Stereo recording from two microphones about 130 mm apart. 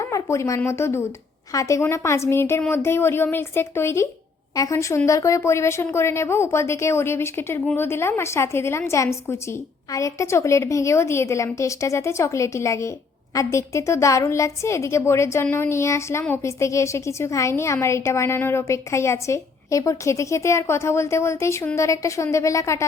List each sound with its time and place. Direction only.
0.0 s a woman's voice: 25° left (ahead or behind)